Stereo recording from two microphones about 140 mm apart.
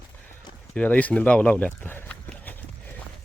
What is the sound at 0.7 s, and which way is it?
Speech, 10° left (ahead or behind).